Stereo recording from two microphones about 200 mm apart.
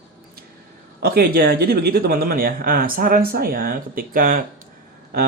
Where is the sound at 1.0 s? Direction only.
50° right (ahead or behind).